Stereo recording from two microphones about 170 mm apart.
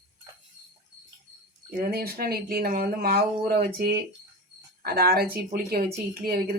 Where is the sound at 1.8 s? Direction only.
60° right (ahead or behind).